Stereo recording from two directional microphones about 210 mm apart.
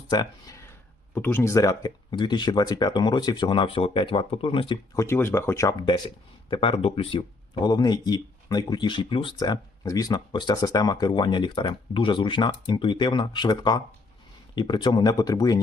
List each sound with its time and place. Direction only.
0.1 s speech: 20° left (ahead or behind)
5.0 s speech: 10° left (ahead or behind)